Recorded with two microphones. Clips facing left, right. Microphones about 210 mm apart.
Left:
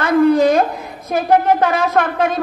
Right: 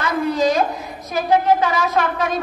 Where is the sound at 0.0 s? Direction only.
55° left (ahead or behind).